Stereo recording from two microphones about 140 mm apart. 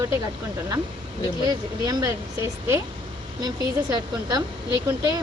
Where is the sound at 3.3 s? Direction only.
30° right (ahead or behind).